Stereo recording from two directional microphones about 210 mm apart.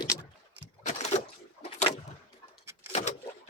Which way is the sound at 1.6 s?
30° left (ahead or behind).